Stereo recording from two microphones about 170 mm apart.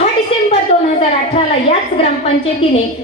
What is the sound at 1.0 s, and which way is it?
A woman's voice, 35° left (ahead or behind).